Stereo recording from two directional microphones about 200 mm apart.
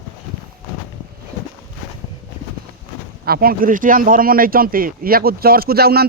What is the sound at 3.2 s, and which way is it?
Speech, 50° right (ahead or behind).